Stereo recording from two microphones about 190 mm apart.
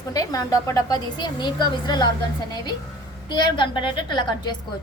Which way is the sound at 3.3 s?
25° left (ahead or behind).